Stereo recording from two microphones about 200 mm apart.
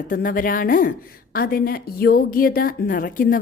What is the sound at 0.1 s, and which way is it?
A woman's voice, 45° left (ahead or behind).